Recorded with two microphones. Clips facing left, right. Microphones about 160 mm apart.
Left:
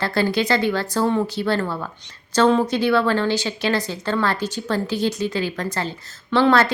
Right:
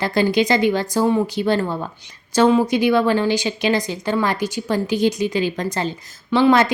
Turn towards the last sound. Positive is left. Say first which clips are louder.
# right 2 dB
turn(degrees=-15)  # may be behind; listen again after turning